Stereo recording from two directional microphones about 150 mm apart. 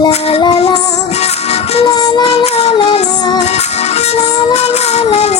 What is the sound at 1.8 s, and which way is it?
Child singing, 25° left (ahead or behind).